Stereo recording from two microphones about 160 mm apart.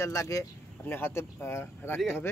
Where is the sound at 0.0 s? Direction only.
20° left (ahead or behind).